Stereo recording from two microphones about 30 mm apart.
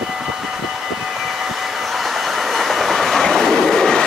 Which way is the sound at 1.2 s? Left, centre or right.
Centre.